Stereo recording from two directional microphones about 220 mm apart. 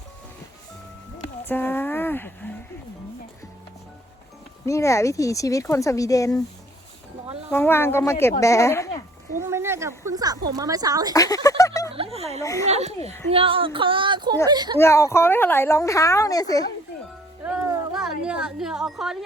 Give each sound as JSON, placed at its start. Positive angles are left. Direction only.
{"t": 1.5, "sound": "speech", "side_deg": 10}
{"t": 4.6, "sound": "a woman's voice", "side_deg": 15}
{"t": 7.5, "sound": "a woman's voice", "side_deg": 10}
{"t": 9.4, "sound": "speech", "side_deg": -10}
{"t": 11.1, "sound": "a woman's voice", "side_deg": 15}
{"t": 11.4, "sound": "a sound", "side_deg": 15}
{"t": 11.9, "sound": "a woman's voice", "side_deg": -25}
{"t": 12.4, "sound": "a woman's voice", "side_deg": 15}
{"t": 12.6, "sound": "a woman's voice", "side_deg": -30}
{"t": 14.8, "sound": "a woman's voice", "side_deg": 15}
{"t": 17.4, "sound": "a sound", "side_deg": -5}